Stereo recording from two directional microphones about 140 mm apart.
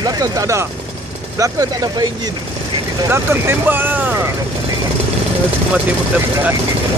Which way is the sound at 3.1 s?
15° right (ahead or behind).